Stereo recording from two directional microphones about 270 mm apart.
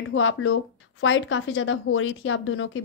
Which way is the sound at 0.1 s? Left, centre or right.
Left.